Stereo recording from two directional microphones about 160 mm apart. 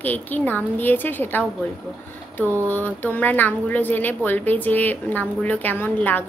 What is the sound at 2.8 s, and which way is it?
Speech, 10° left (ahead or behind).